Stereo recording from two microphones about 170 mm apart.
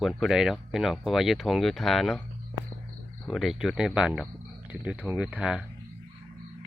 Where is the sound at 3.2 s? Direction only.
Centre (ahead or behind).